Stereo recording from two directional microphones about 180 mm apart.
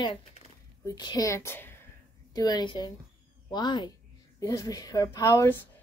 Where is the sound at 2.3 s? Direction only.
20° left (ahead or behind).